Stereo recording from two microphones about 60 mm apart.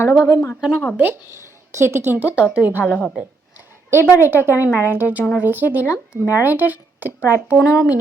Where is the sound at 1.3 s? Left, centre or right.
Right.